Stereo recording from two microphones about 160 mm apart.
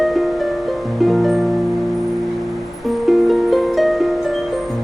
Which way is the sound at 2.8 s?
Centre (ahead or behind).